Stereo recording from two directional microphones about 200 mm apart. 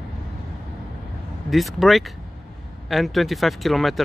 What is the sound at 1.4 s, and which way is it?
Speech, centre (ahead or behind).